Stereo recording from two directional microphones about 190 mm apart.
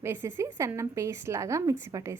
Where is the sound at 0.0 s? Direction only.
15° right (ahead or behind).